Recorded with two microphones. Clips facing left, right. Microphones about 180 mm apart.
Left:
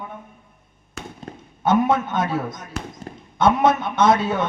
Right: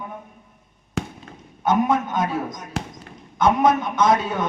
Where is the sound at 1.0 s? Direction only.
90° right.